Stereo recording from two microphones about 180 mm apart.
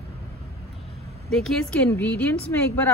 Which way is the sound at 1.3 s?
5° left (ahead or behind).